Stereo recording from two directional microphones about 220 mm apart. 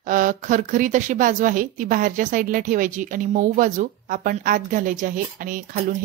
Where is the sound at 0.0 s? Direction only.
35° right (ahead or behind).